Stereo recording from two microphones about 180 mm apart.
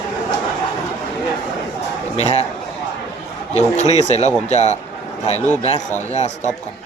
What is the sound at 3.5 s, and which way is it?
Speech, 40° left (ahead or behind).